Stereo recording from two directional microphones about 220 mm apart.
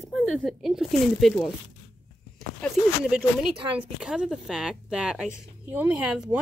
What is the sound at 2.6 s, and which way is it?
Speech, centre (ahead or behind).